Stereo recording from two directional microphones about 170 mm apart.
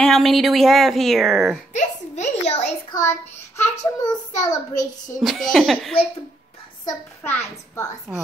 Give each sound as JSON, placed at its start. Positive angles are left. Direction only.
{"t": 0.0, "sound": "a woman's voice", "side_deg": 0}
{"t": 1.7, "sound": "a sound", "side_deg": 45}
{"t": 2.9, "sound": "child singing", "side_deg": 15}
{"t": 4.0, "sound": "a child's voice", "side_deg": 20}
{"t": 5.2, "sound": "a woman's voice", "side_deg": 0}
{"t": 6.9, "sound": "a child's voice", "side_deg": 15}